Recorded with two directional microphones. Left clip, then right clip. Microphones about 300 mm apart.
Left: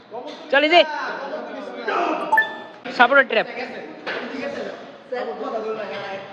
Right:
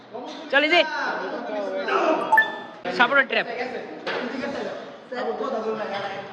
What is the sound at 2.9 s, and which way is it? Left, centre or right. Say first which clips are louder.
Speech: left 4 dB; centre.